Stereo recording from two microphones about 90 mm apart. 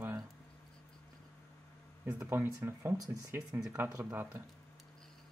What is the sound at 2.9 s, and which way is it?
Speech, 40° right (ahead or behind).